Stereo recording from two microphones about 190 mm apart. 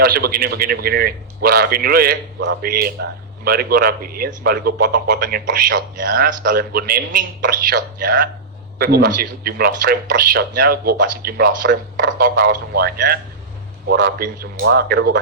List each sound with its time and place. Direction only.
0.0 s speech: 50° right (ahead or behind)